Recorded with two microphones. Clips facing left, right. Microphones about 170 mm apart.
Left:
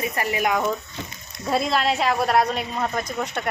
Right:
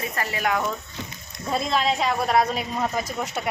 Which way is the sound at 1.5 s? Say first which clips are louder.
Left 2 dB; centre (ahead or behind).